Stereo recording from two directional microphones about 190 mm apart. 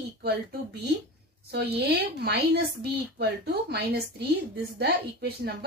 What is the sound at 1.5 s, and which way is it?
A woman's voice, 60° right (ahead or behind).